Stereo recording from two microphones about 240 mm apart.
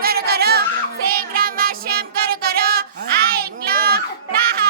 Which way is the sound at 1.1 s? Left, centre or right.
Right.